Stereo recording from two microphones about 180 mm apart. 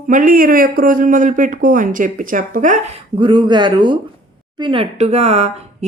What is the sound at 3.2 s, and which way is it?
Speech, 25° right (ahead or behind).